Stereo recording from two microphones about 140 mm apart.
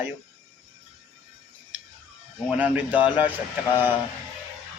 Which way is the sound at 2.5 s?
10° right (ahead or behind).